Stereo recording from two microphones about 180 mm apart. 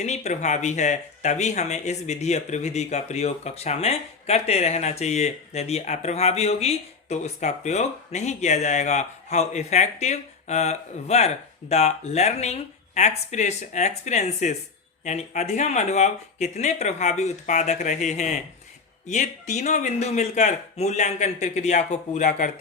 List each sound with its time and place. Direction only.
0.0 s speech: 40° left (ahead or behind)